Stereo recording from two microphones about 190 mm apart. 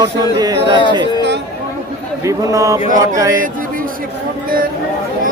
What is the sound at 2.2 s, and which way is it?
Speech, 15° right (ahead or behind).